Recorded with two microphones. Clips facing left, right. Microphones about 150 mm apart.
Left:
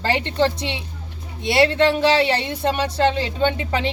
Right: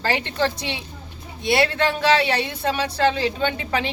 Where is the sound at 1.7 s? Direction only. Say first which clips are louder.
Left 3 dB; 25° left (ahead or behind).